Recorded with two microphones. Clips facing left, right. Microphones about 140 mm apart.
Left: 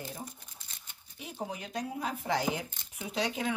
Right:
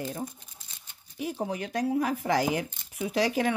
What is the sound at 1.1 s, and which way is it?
A woman's voice, 65° right (ahead or behind).